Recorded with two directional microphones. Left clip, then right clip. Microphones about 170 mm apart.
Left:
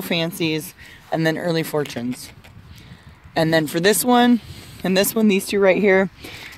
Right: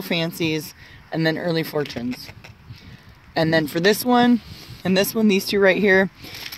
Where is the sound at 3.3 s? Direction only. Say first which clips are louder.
Left 1 dB; 20° left (ahead or behind).